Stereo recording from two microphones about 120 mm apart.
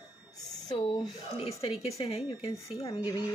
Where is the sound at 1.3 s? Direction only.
55° left (ahead or behind).